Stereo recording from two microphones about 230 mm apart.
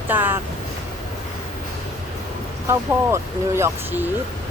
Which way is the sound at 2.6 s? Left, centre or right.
Centre.